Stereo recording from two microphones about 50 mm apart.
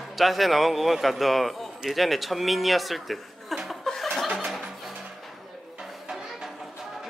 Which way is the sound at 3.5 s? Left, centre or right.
Centre.